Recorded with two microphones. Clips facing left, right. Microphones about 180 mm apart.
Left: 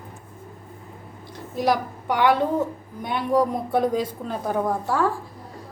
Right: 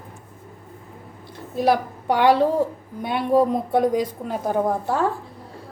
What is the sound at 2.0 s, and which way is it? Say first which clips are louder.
A woman's voice: right 3 dB; 30° right (ahead or behind).